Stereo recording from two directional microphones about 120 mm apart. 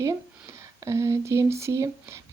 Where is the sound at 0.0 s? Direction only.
25° right (ahead or behind).